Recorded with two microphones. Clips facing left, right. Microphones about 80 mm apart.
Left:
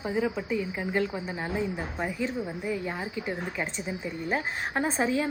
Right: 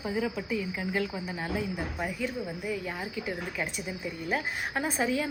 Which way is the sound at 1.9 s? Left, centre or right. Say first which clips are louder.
Left 2 dB; centre.